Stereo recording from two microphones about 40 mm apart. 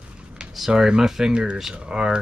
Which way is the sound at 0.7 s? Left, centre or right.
Centre.